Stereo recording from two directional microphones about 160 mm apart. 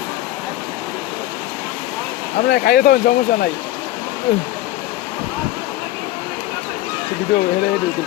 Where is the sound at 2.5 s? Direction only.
75° left (ahead or behind).